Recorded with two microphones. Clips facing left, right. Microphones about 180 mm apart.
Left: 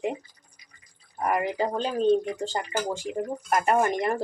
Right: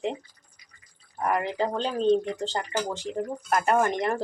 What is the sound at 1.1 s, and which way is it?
Speech, 10° left (ahead or behind).